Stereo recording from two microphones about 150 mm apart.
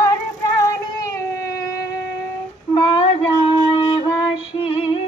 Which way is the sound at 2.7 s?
35° left (ahead or behind).